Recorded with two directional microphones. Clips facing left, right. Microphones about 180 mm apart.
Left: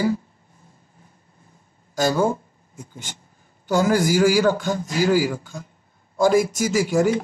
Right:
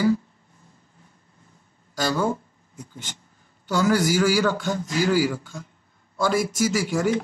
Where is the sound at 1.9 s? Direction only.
45° left (ahead or behind).